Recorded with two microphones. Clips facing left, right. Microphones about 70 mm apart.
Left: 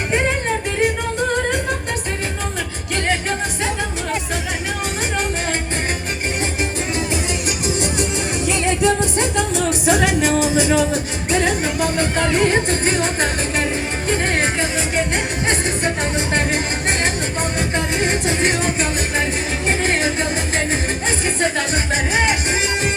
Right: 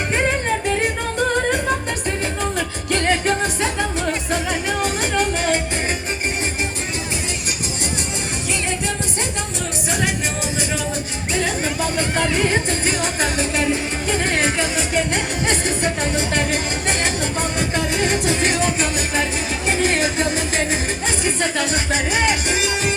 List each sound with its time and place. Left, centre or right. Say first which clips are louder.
3.1 s music: right 2 dB; centre
9.8 s music: left 6 dB; left
11.3 s music: left 3 dB; left
17.7 s music: even; left